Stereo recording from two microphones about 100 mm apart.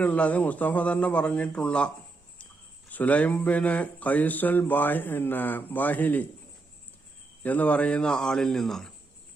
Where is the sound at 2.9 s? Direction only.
15° left (ahead or behind).